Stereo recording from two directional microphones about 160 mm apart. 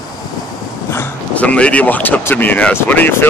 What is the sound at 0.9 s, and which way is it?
Speech, 10° left (ahead or behind).